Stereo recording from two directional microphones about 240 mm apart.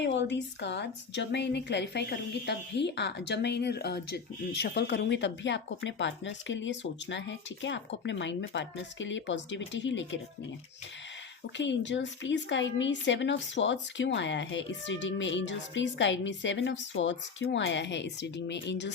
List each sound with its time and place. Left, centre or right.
0.0 s a woman's voice: left
11.5 s a woman's voice: left